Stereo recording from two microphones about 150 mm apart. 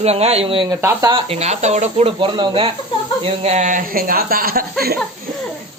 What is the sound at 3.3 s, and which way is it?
Speech, 45° right (ahead or behind).